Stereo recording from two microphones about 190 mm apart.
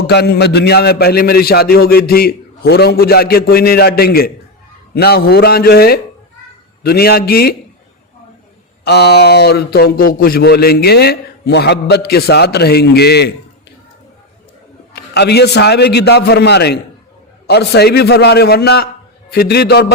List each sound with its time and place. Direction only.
0.1 s a man's voice: 60° left (ahead or behind)
8.8 s a man's voice: 60° left (ahead or behind)
14.9 s a man's voice: 60° left (ahead or behind)